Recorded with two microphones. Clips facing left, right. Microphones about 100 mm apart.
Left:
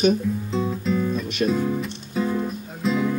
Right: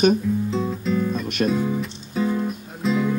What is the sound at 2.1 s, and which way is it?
Music, centre (ahead or behind).